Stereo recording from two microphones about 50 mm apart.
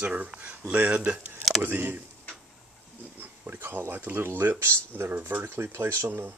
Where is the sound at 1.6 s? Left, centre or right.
Right.